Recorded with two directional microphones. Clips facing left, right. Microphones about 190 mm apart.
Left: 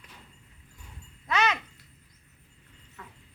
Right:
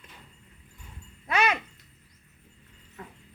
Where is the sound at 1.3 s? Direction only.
10° right (ahead or behind).